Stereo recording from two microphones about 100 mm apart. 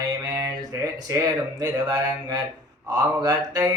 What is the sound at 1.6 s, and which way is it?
Mantra, 40° right (ahead or behind).